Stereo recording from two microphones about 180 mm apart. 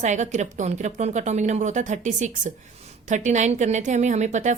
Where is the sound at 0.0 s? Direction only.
40° right (ahead or behind).